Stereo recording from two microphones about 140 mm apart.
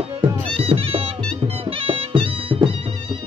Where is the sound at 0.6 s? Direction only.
45° right (ahead or behind).